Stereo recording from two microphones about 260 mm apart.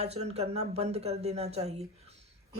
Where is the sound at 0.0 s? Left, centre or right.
Right.